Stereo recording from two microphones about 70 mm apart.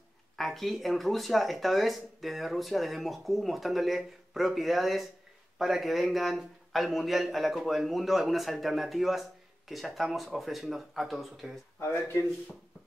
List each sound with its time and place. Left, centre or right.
0.4 s a man's voice: centre
11.8 s speech: left